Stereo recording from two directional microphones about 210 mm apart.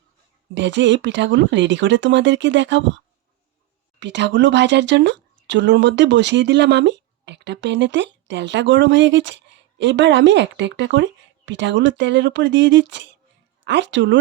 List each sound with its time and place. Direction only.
0.5 s speech: 55° right (ahead or behind)
4.0 s speech: 55° right (ahead or behind)